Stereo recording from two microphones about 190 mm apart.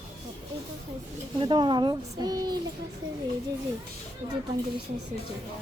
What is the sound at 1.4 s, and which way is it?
A woman's voice, 25° right (ahead or behind).